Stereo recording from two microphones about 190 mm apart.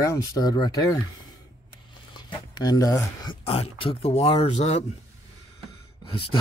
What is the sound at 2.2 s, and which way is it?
Speech, 20° left (ahead or behind).